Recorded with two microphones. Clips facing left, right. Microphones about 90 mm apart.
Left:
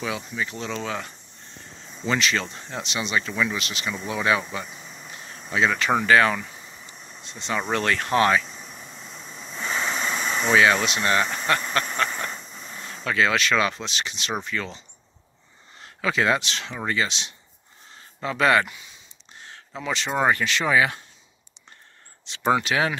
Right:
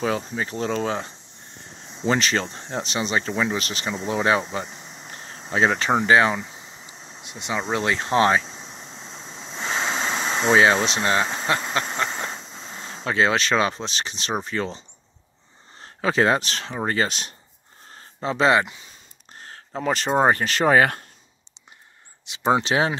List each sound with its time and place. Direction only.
0.0 s speech: 35° right (ahead or behind)
1.6 s a sound: 20° right (ahead or behind)
2.1 s speech: 35° right (ahead or behind); by 5.1 s 20° right (ahead or behind)
5.1 s a sound: 30° right (ahead or behind)
7.2 s speech: 15° right (ahead or behind); by 14.8 s 35° right (ahead or behind)
15.8 s speech: 35° right (ahead or behind)
18.2 s speech: 25° right (ahead or behind)
19.3 s speech: 40° right (ahead or behind)
22.2 s speech: 15° right (ahead or behind)
22.6 s speech: 30° right (ahead or behind)